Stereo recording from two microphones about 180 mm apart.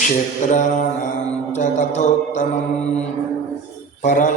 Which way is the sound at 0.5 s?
45° left (ahead or behind).